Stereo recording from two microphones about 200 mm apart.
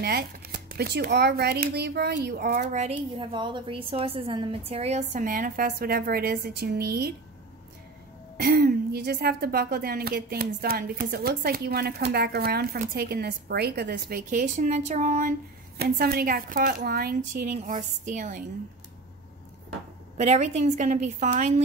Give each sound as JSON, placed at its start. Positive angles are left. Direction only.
{"t": 0.0, "sound": "a woman's voice", "side_deg": -50}
{"t": 3.2, "sound": "a woman's voice", "side_deg": -25}
{"t": 8.4, "sound": "a woman's voice", "side_deg": -50}
{"t": 15.8, "sound": "a woman's voice", "side_deg": -50}
{"t": 20.2, "sound": "a woman's voice", "side_deg": -35}